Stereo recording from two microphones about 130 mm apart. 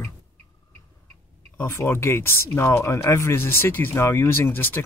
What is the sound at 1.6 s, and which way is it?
Speech, 20° left (ahead or behind).